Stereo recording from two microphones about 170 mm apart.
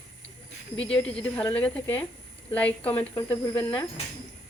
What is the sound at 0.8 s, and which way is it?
Speech, 5° left (ahead or behind).